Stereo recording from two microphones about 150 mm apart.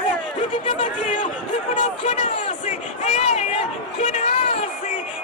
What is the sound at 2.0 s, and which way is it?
Speech, 45° left (ahead or behind).